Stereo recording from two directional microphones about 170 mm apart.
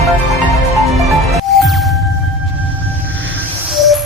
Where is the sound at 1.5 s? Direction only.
Centre (ahead or behind).